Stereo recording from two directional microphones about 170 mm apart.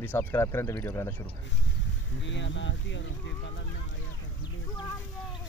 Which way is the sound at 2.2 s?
90° left.